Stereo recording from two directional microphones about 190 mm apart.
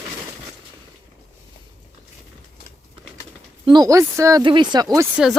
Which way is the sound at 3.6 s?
20° right (ahead or behind).